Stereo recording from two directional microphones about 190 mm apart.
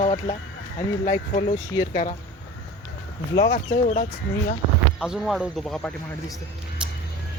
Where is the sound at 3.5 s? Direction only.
45° left (ahead or behind).